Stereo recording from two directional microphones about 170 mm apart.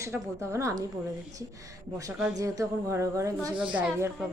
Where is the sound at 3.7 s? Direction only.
5° right (ahead or behind).